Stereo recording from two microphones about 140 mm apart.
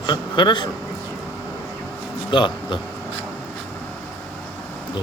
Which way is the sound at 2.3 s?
35° left (ahead or behind).